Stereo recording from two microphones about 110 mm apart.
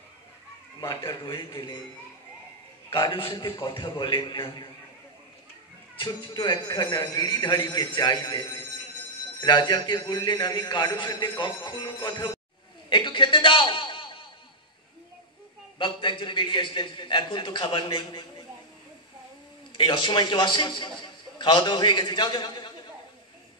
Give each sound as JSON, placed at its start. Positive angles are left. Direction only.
{"t": 0.7, "sound": "speech", "side_deg": 40}
{"t": 2.9, "sound": "a man's voice", "side_deg": 50}
{"t": 5.9, "sound": "a man's voice", "side_deg": 40}
{"t": 12.9, "sound": "a sound", "side_deg": 45}
{"t": 15.8, "sound": "a man's voice", "side_deg": 45}
{"t": 19.7, "sound": "a man's voice", "side_deg": 50}